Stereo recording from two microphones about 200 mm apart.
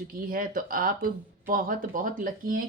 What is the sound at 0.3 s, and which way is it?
A woman's voice, 45° right (ahead or behind).